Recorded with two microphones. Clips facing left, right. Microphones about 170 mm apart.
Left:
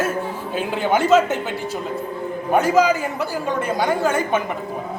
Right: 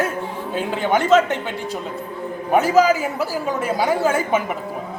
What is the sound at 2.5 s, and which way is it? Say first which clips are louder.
A woman's voice: right 1 dB; 5° right (ahead or behind).